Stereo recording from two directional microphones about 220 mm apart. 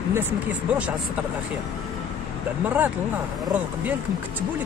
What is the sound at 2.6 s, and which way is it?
Speech, 10° right (ahead or behind).